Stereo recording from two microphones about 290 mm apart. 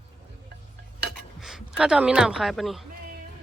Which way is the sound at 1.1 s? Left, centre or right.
Centre.